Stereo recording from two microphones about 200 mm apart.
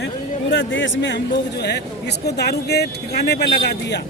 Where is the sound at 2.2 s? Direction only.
55° left (ahead or behind).